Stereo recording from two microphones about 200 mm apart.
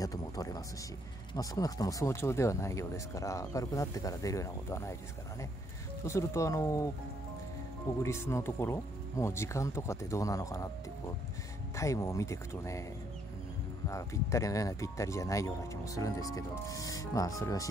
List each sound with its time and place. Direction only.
0.0 s speech: 15° left (ahead or behind)
6.0 s speech: 15° left (ahead or behind)
8.0 s speech: 15° left (ahead or behind)
11.7 s speech: 15° left (ahead or behind)
13.8 s speech: 15° left (ahead or behind)